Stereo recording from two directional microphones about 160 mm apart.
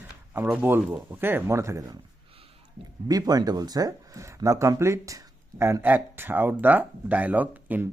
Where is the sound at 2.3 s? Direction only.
35° right (ahead or behind).